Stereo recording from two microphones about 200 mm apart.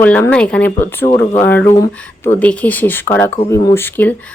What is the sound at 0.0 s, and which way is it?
Speech, 10° left (ahead or behind).